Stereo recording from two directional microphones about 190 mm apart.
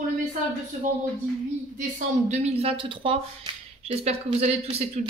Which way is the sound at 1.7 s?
40° right (ahead or behind).